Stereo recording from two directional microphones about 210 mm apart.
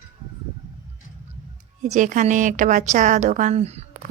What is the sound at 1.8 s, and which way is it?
Speech, 35° right (ahead or behind).